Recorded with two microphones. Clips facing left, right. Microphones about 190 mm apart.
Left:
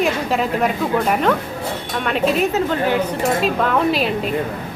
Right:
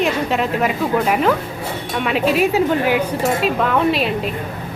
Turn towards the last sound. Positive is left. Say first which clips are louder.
# right 1 dB
turn(degrees=0)  # may be behind; listen again after turning